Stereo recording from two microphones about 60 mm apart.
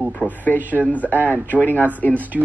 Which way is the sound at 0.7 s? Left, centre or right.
Left.